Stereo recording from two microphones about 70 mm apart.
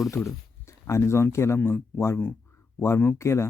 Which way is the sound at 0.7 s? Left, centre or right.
Left.